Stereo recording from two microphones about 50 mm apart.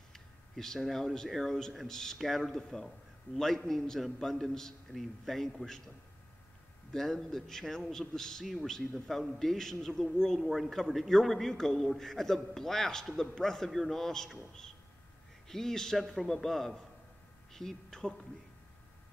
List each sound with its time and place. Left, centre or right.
0.1 s a sound: centre
0.7 s a man's voice: centre
6.9 s a man's voice: centre